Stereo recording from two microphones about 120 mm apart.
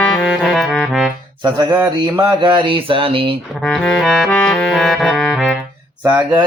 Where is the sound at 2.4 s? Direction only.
45° right (ahead or behind).